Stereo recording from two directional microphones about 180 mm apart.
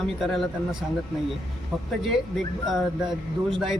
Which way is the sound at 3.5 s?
Centre (ahead or behind).